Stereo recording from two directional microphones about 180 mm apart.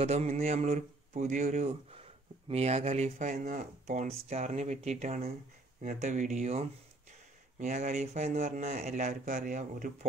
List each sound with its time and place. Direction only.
0.0 s speech: 40° right (ahead or behind)